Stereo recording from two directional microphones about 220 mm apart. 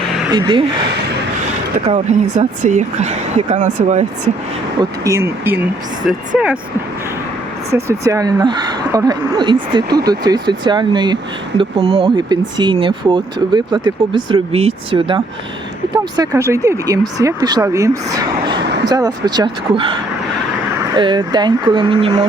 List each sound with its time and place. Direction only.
0.3 s speech: 20° right (ahead or behind)
1.9 s a woman's voice: 30° right (ahead or behind)
4.8 s speech: 15° right (ahead or behind)
7.7 s speech: 15° right (ahead or behind)